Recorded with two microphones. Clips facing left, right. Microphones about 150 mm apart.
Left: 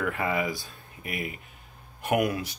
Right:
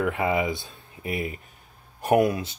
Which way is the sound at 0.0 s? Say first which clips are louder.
Right 4 dB; 20° right (ahead or behind).